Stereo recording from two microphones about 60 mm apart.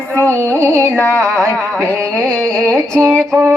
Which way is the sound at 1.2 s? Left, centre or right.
Right.